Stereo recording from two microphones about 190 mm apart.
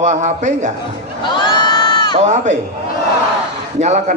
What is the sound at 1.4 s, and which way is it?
Crowd, 25° left (ahead or behind).